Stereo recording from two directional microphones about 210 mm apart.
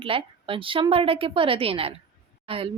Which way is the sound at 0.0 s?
25° right (ahead or behind).